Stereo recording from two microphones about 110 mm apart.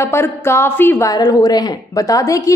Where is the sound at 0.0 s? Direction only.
25° left (ahead or behind).